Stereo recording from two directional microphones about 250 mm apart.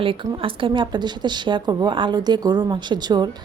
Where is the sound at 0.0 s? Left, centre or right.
Centre.